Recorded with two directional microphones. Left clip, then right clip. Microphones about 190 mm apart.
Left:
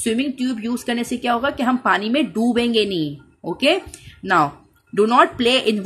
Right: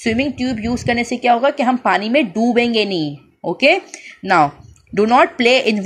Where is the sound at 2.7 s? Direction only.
30° left (ahead or behind).